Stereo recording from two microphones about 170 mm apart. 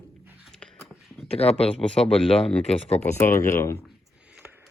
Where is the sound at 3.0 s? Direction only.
15° left (ahead or behind).